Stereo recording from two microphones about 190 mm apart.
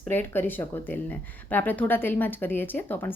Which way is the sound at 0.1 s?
10° left (ahead or behind).